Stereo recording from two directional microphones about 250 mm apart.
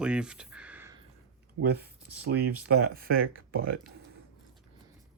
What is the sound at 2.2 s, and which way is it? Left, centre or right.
Speech, right.